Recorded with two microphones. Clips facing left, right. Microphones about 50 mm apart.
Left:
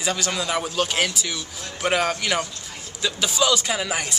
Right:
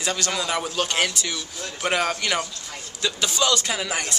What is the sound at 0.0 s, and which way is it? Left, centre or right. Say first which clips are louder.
A man's voice: left 1 dB; centre.